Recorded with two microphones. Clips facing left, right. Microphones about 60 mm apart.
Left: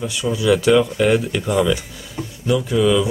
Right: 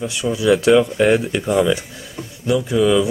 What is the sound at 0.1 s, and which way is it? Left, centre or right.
Speech, right.